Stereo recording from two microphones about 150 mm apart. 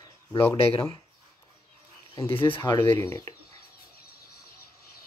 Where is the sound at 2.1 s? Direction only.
20° left (ahead or behind).